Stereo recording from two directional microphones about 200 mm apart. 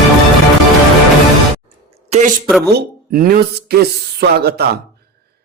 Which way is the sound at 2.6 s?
50° right (ahead or behind).